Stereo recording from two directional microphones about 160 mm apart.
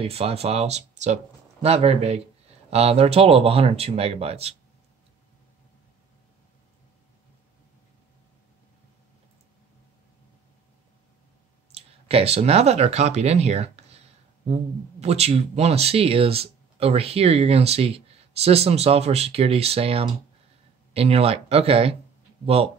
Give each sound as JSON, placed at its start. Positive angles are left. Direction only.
{"t": 0.0, "sound": "speech", "side_deg": -40}
{"t": 11.7, "sound": "speech", "side_deg": -40}